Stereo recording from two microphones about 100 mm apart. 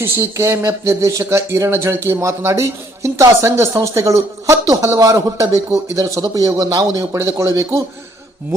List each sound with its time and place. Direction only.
0.0 s speech: 25° right (ahead or behind)